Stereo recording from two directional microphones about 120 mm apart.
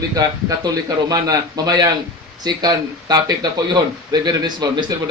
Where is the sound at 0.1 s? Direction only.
30° right (ahead or behind).